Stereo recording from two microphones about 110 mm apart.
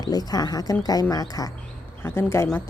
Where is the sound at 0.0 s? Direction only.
35° left (ahead or behind).